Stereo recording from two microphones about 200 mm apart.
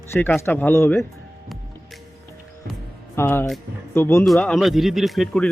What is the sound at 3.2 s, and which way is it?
Speech, 10° left (ahead or behind).